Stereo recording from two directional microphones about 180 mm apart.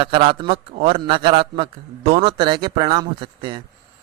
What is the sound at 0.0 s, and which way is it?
A man's voice, 30° right (ahead or behind).